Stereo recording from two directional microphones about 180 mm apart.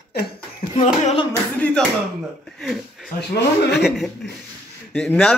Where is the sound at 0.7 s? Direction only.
35° left (ahead or behind).